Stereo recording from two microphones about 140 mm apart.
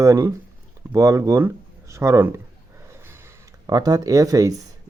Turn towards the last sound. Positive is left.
turn(degrees=-25)  # may be behind; listen again after turning